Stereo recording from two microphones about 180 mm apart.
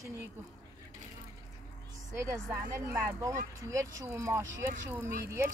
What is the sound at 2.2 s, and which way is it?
Speech, 15° right (ahead or behind).